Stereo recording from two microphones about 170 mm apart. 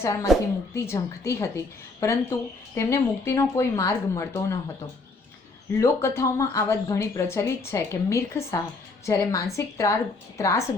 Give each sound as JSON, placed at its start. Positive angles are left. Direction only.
{"t": 0.0, "sound": "a woman's voice", "side_deg": 20}
{"t": 5.8, "sound": "speech", "side_deg": 15}